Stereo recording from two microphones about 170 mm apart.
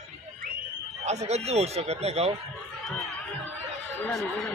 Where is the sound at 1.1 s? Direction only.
40° right (ahead or behind).